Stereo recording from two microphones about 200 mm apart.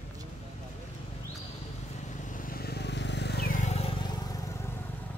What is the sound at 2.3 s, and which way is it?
Vehicle, 45° left (ahead or behind).